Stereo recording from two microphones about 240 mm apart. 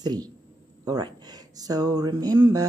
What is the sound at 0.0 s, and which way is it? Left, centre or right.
Speech, centre.